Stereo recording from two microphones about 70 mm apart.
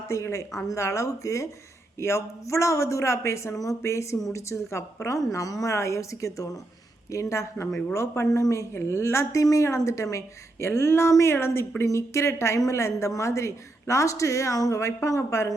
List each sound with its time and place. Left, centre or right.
0.1 s a woman's voice: left